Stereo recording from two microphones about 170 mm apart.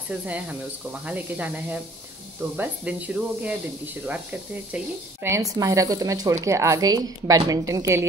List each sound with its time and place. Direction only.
1.0 s speech: 10° right (ahead or behind)